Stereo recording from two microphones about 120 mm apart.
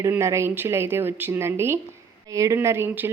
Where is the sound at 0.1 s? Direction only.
20° right (ahead or behind).